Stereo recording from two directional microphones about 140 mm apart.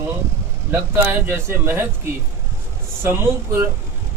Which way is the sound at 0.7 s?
15° right (ahead or behind).